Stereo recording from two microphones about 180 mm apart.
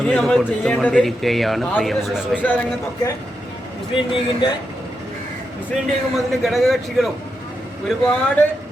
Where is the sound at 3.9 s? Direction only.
30° left (ahead or behind).